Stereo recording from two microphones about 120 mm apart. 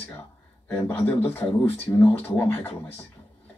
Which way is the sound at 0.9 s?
15° left (ahead or behind).